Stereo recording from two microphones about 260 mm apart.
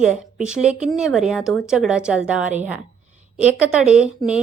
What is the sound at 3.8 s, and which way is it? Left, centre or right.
Speech, centre.